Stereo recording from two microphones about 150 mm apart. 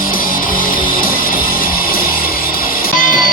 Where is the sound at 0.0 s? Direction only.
70° left (ahead or behind).